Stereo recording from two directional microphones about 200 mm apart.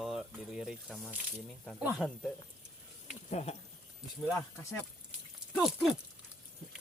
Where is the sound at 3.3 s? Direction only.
30° left (ahead or behind).